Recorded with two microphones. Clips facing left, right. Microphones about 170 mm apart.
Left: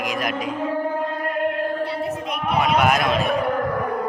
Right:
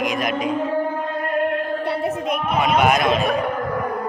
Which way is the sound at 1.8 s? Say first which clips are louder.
Right 2 dB; 55° right (ahead or behind).